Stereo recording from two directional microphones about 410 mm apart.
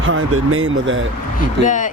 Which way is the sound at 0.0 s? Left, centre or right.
Right.